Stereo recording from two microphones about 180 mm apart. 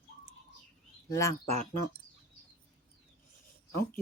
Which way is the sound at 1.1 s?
15° left (ahead or behind).